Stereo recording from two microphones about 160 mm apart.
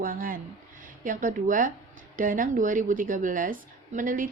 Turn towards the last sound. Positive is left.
turn(degrees=-55)  # may be behind; listen again after turning